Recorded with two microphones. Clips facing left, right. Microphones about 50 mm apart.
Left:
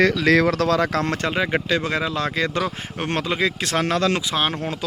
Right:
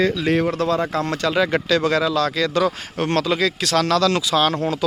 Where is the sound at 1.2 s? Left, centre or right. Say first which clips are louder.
Right 3 dB; left.